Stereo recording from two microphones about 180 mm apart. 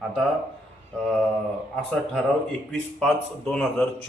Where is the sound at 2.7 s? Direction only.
5° left (ahead or behind).